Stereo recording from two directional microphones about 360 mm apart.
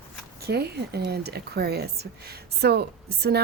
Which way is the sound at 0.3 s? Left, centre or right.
Right.